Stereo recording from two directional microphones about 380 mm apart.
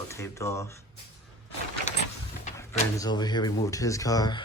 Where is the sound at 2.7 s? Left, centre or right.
Centre.